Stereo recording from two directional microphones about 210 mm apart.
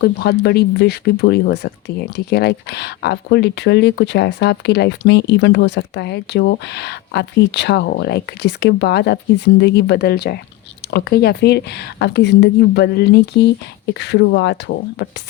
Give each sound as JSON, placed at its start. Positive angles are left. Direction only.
{"t": 0.0, "sound": "speech", "side_deg": 50}